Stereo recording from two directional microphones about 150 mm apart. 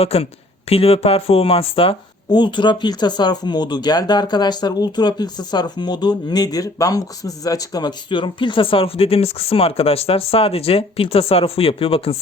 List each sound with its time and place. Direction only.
0.0 s speech: 40° left (ahead or behind)